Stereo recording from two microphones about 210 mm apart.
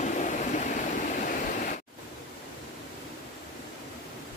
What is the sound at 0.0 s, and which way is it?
Vehicle, 35° left (ahead or behind).